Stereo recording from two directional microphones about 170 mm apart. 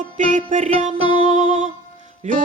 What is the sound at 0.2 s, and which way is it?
Music, 45° right (ahead or behind).